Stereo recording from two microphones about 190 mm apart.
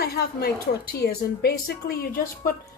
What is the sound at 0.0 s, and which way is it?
A woman's voice, 55° left (ahead or behind).